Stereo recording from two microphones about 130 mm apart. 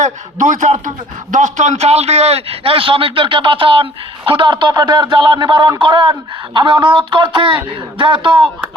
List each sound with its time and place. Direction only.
0.0 s a man's voice: 75° right (ahead or behind); by 8.4 s 40° right (ahead or behind)